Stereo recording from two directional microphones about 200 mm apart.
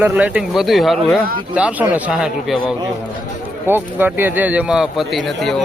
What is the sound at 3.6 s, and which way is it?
Speech, 10° right (ahead or behind).